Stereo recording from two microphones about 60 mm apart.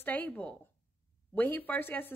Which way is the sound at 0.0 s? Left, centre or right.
Left.